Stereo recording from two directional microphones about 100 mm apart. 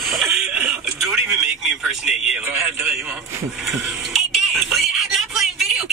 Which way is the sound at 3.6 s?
5° right (ahead or behind).